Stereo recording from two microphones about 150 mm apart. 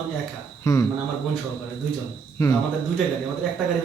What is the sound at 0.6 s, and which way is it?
Speech, 20° left (ahead or behind).